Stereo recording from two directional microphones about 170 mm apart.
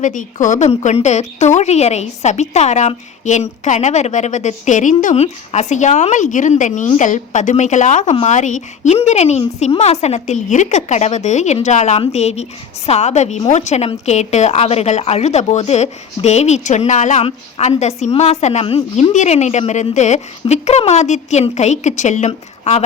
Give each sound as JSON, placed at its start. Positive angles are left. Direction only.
{"t": 0.0, "sound": "a woman's voice", "side_deg": 50}